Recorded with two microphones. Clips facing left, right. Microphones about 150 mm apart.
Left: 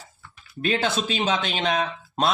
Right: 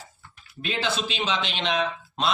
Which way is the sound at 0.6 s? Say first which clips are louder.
Left 4 dB; 45° left (ahead or behind).